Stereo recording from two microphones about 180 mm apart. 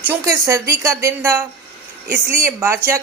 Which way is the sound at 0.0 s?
15° right (ahead or behind).